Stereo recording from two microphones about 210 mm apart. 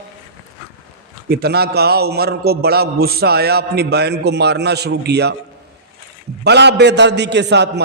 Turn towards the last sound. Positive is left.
turn(degrees=-55)  # may be behind; listen again after turning